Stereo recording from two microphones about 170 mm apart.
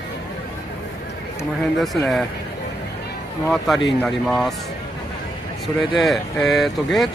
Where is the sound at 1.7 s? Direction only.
Centre (ahead or behind).